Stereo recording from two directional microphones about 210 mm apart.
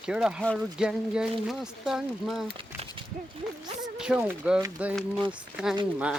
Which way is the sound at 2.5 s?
25° right (ahead or behind).